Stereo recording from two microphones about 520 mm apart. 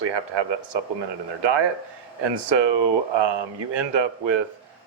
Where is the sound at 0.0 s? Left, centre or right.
Right.